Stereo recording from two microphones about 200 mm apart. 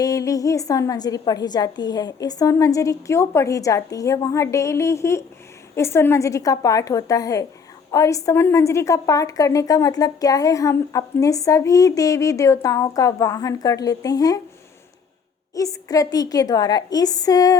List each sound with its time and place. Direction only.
0.0 s a woman's voice: 15° left (ahead or behind)
15.5 s a woman's voice: 15° left (ahead or behind)